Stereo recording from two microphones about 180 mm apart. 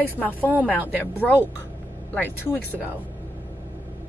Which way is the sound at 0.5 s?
10° right (ahead or behind).